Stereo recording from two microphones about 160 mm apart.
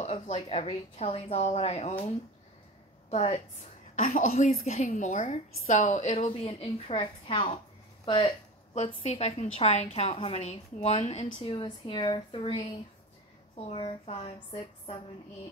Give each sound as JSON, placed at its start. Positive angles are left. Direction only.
{"t": 0.0, "sound": "a woman's voice", "side_deg": 40}
{"t": 8.7, "sound": "a woman's voice", "side_deg": 40}